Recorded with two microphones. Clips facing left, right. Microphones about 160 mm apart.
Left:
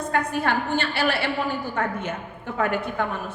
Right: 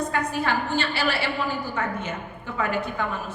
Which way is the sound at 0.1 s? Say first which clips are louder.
Left 2 dB; 55° left (ahead or behind).